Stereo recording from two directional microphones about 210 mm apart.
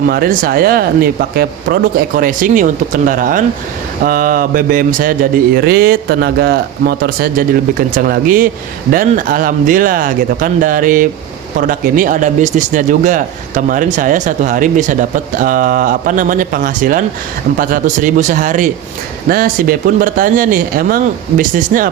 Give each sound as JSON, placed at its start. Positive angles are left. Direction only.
{"t": 0.1, "sound": "speech", "side_deg": -45}